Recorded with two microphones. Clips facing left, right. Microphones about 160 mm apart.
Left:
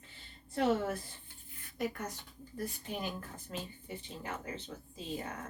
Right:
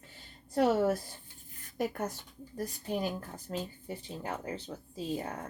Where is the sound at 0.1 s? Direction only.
40° right (ahead or behind).